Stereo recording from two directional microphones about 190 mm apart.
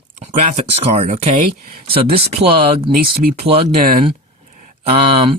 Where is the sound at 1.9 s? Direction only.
30° right (ahead or behind).